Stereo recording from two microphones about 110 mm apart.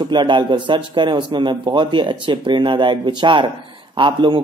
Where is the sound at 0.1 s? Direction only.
45° right (ahead or behind).